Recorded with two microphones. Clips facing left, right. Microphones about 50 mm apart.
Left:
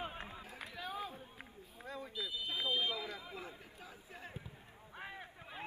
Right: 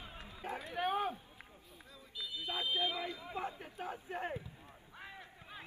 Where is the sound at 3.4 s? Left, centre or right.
Right.